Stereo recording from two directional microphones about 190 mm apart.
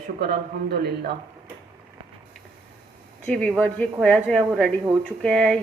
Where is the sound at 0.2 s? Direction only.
55° right (ahead or behind).